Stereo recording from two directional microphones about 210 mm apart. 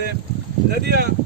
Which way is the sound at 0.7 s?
50° right (ahead or behind).